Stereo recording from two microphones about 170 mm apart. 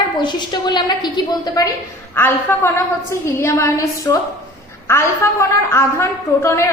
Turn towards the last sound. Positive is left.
turn(degrees=15)  # may be behind; listen again after turning